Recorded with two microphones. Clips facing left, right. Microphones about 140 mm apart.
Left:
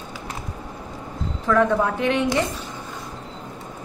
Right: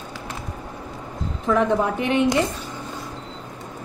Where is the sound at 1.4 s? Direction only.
20° right (ahead or behind).